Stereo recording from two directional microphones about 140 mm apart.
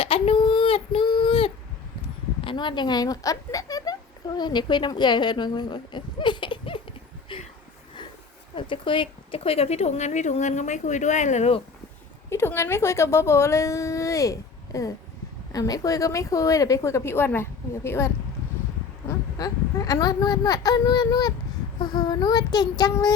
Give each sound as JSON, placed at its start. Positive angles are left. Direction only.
{"t": 0.0, "sound": "child singing", "side_deg": 40}
{"t": 2.4, "sound": "speech", "side_deg": 35}
{"t": 7.3, "sound": "a sound", "side_deg": 35}
{"t": 8.5, "sound": "speech", "side_deg": 35}
{"t": 12.3, "sound": "a woman's voice", "side_deg": 20}